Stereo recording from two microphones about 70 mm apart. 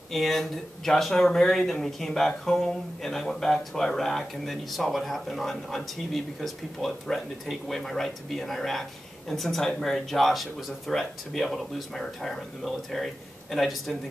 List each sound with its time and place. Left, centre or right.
0.1 s speech: centre